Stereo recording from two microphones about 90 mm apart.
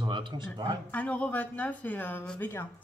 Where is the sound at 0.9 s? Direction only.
15° left (ahead or behind).